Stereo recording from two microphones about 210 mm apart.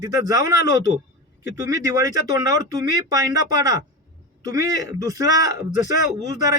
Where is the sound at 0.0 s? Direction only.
15° right (ahead or behind).